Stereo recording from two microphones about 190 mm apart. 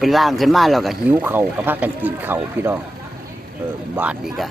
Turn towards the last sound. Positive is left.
turn(degrees=-10)  # may be behind; listen again after turning